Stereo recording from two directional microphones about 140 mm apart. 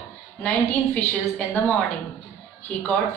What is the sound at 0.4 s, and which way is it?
Speech, 10° left (ahead or behind).